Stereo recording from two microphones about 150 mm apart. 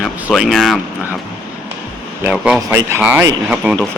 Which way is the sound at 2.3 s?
5° right (ahead or behind).